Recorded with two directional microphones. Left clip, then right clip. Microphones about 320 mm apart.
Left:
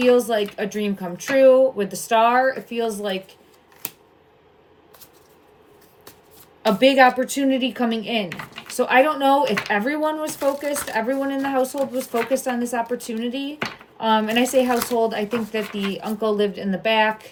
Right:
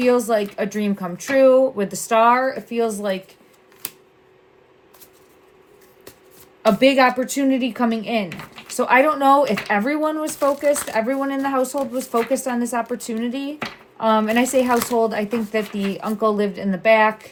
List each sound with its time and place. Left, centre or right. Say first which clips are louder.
0.0 s speech: even; centre
6.7 s speech: even; centre